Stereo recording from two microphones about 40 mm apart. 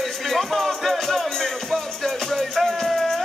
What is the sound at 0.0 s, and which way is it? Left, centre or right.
Music, centre.